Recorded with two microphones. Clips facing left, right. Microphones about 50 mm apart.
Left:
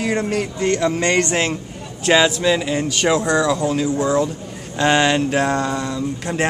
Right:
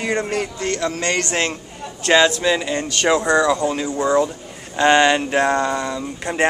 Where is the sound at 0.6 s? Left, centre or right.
Centre.